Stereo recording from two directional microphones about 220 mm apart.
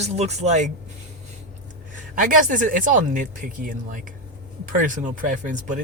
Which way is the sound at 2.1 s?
35° right (ahead or behind).